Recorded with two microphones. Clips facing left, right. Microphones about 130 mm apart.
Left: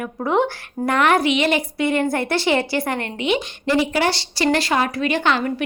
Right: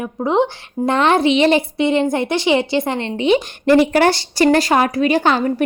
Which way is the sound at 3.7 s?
55° right (ahead or behind).